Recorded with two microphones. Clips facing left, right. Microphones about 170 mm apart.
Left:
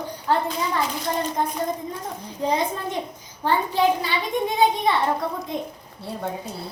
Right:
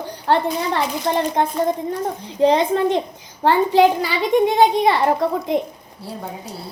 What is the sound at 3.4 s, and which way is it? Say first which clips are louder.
A woman's voice: right 7 dB; 90° right.